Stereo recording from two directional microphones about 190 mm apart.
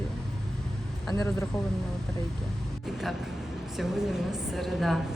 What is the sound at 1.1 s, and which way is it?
Speech, 15° left (ahead or behind).